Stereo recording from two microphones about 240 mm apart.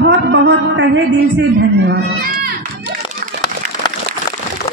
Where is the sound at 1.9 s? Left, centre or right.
Right.